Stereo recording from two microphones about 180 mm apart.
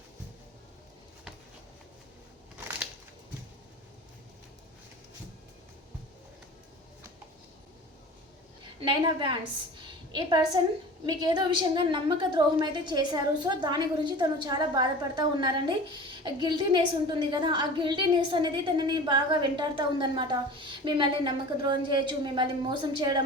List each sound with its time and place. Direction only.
8.8 s a woman's voice: 25° right (ahead or behind)